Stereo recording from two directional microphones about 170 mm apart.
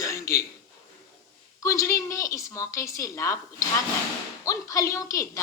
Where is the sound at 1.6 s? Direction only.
15° left (ahead or behind).